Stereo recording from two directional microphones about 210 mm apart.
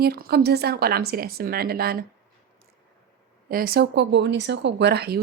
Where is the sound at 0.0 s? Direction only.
50° right (ahead or behind).